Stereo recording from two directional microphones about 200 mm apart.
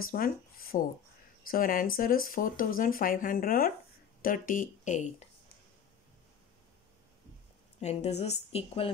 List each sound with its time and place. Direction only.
0.0 s speech: 45° left (ahead or behind)
7.8 s a woman's voice: 35° left (ahead or behind)